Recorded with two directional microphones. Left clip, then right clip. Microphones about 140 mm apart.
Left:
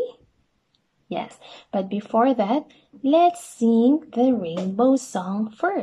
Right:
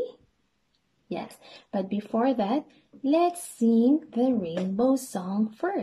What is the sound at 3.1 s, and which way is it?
A woman's voice, 20° right (ahead or behind).